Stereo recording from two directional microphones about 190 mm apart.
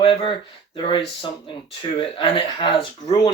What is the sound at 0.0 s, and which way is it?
A man's voice, 30° left (ahead or behind).